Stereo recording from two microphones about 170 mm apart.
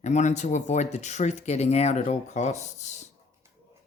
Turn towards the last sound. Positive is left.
turn(degrees=45)  # may be behind; listen again after turning